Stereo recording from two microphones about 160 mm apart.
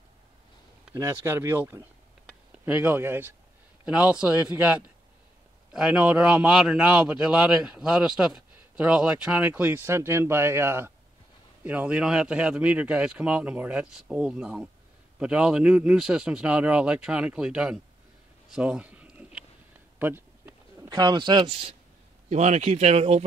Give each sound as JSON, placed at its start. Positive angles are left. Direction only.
{"t": 0.9, "sound": "a man's voice", "side_deg": -15}
{"t": 18.5, "sound": "a sound", "side_deg": -5}
{"t": 20.0, "sound": "bird", "side_deg": -15}
{"t": 20.9, "sound": "speech", "side_deg": -25}